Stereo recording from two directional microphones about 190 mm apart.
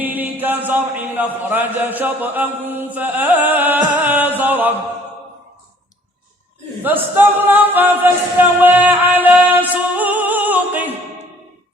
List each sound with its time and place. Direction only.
0.0 s speech: 10° right (ahead or behind)
2.9 s music: 10° right (ahead or behind)
6.8 s a capella: 10° right (ahead or behind)